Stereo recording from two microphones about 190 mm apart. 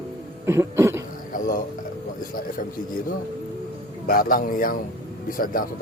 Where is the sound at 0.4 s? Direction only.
15° right (ahead or behind).